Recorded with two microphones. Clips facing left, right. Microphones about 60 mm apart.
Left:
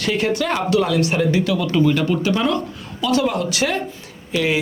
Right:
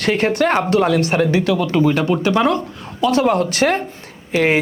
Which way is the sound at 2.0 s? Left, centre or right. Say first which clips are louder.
Right 2 dB; right.